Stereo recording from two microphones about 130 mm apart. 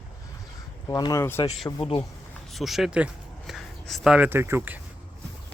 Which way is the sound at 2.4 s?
Centre (ahead or behind).